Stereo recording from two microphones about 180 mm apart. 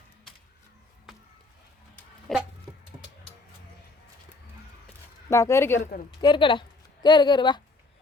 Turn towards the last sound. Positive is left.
turn(degrees=25)  # may be behind; listen again after turning